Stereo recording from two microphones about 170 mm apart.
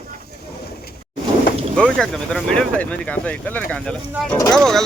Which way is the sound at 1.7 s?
5° left (ahead or behind).